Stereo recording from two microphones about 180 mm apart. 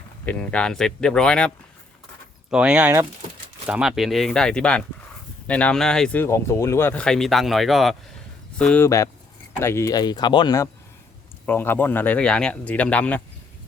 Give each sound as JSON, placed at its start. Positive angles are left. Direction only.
{"t": 0.3, "sound": "speech", "side_deg": 5}
{"t": 2.5, "sound": "speech", "side_deg": -5}
{"t": 11.4, "sound": "speech", "side_deg": 10}